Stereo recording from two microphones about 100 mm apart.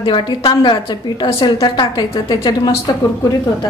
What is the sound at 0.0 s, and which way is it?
A woman's voice, 55° left (ahead or behind).